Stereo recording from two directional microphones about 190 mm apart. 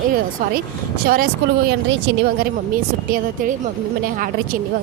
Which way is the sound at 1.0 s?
50° right (ahead or behind).